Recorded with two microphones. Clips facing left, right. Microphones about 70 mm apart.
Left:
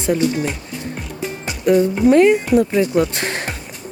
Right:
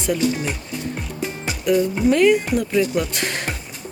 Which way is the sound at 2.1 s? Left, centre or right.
Left.